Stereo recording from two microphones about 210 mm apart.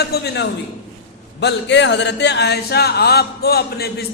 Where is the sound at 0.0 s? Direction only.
50° left (ahead or behind).